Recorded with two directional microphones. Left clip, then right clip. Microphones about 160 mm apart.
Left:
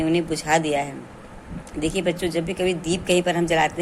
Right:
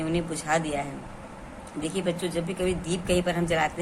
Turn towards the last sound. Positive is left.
turn(degrees=30)  # may be behind; listen again after turning